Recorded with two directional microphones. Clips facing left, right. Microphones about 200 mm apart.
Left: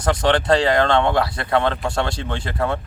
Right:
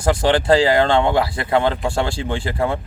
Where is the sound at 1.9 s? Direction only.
10° right (ahead or behind).